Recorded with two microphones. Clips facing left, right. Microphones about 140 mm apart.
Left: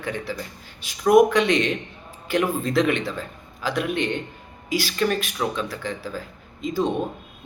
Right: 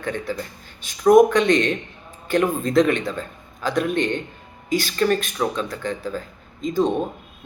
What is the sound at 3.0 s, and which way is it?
Speech, 5° left (ahead or behind).